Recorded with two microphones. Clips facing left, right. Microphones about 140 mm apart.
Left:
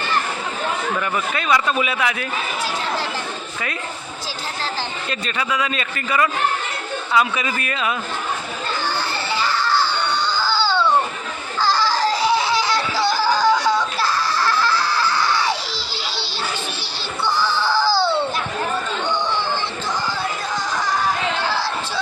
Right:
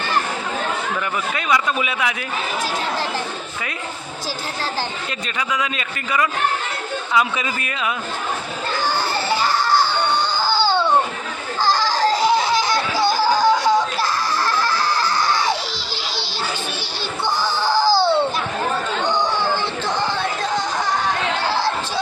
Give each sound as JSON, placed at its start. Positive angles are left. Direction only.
{"t": 1.4, "sound": "a man's voice", "side_deg": -10}
{"t": 5.4, "sound": "a man's voice", "side_deg": -15}
{"t": 9.4, "sound": "music", "side_deg": -45}
{"t": 10.0, "sound": "a sound", "side_deg": -50}
{"t": 10.4, "sound": "music", "side_deg": -15}
{"t": 11.6, "sound": "a sound", "side_deg": -50}
{"t": 12.3, "sound": "laughter", "side_deg": -15}
{"t": 14.7, "sound": "music", "side_deg": -15}
{"t": 15.0, "sound": "music", "side_deg": -45}
{"t": 17.4, "sound": "a sound", "side_deg": -15}
{"t": 19.0, "sound": "chatter", "side_deg": -40}